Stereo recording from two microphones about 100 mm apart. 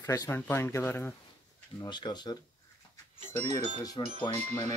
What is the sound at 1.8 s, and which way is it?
Speech, 45° left (ahead or behind).